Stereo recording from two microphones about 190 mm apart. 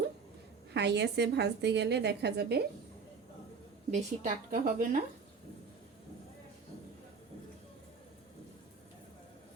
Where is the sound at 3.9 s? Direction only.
40° right (ahead or behind).